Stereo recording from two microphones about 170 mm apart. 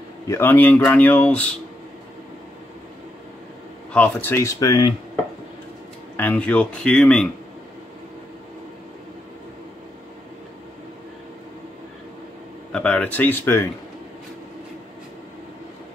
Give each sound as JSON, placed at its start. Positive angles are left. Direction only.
{"t": 0.3, "sound": "speech", "side_deg": 15}
{"t": 3.9, "sound": "speech", "side_deg": 10}
{"t": 6.1, "sound": "speech", "side_deg": 10}
{"t": 12.7, "sound": "speech", "side_deg": 5}